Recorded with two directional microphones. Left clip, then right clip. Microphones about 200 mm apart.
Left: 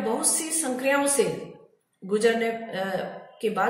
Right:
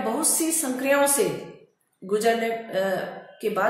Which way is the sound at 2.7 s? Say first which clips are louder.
Right 4 dB; 50° right (ahead or behind).